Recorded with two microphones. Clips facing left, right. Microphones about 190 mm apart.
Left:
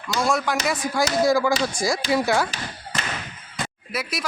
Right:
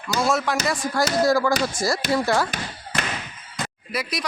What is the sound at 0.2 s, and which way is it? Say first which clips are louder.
Speech: even; centre (ahead or behind).